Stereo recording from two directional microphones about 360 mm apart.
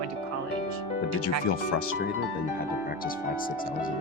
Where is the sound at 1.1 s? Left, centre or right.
Left.